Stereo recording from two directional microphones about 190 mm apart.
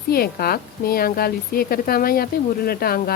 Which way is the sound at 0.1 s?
55° left (ahead or behind).